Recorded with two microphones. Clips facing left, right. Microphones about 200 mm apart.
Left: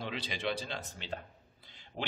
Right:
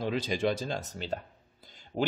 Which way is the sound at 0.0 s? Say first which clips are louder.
Right 8 dB; 45° right (ahead or behind).